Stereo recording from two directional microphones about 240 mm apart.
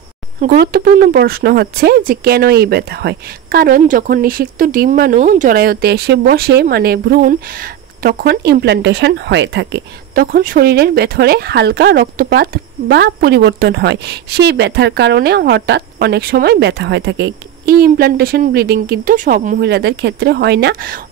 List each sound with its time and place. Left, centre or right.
0.4 s a woman's voice: right